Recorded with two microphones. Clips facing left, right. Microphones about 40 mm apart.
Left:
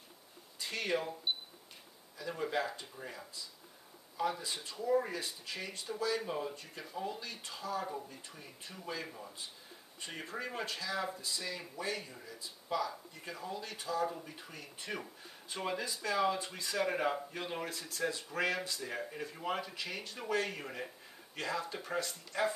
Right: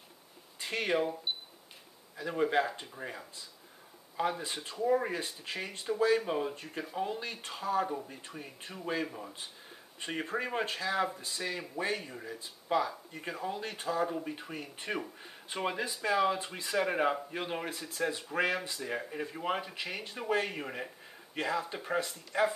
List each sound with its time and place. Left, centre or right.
0.6 s speech: right
1.3 s camera: centre
2.1 s speech: right
9.0 s speech: right
9.9 s speech: right